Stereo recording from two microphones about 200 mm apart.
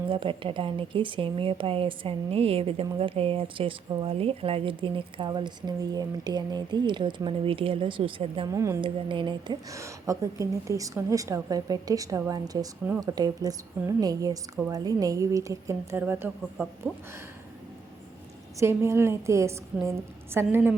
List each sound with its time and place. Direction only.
0.1 s speech: 25° right (ahead or behind)
8.5 s a woman's voice: 15° right (ahead or behind)
18.6 s a woman's voice: 10° right (ahead or behind)